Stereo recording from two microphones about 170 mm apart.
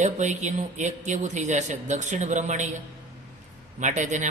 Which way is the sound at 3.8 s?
45° right (ahead or behind).